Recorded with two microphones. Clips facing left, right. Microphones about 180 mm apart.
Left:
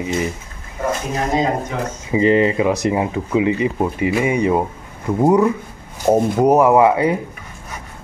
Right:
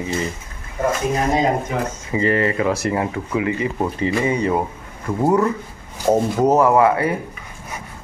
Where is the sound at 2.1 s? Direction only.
20° left (ahead or behind).